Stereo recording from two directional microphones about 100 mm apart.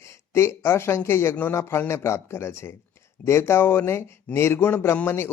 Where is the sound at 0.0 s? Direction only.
25° left (ahead or behind).